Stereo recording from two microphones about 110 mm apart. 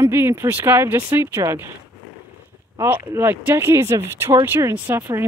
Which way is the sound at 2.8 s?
20° right (ahead or behind).